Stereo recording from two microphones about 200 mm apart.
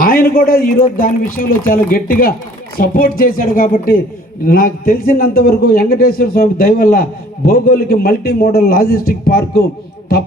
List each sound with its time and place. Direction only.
0.0 s a man's voice: 45° left (ahead or behind)